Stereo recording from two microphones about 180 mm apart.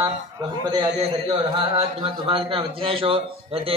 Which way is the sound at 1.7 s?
30° right (ahead or behind).